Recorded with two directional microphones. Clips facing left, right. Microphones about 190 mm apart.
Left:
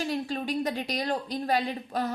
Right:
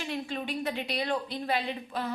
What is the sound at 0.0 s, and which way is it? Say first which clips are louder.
A woman's voice: left 4 dB; 40° left (ahead or behind).